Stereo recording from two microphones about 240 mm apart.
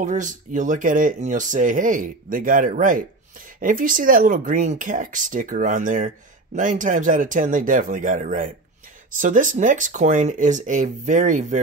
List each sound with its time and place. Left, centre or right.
0.0 s speech: right